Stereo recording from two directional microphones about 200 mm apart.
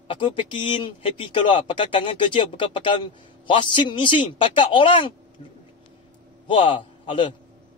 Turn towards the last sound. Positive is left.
turn(degrees=25)  # may be behind; listen again after turning